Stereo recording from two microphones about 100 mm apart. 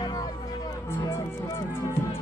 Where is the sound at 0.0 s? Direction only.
40° left (ahead or behind).